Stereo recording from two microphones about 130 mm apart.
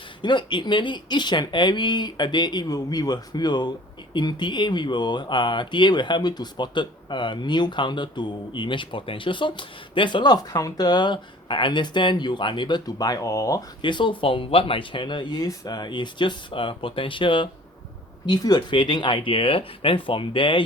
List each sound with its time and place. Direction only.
0.2 s speech: 35° left (ahead or behind)